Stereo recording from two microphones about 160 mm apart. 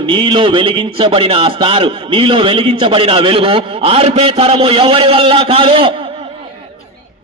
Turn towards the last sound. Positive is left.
turn(degrees=-35)  # may be behind; listen again after turning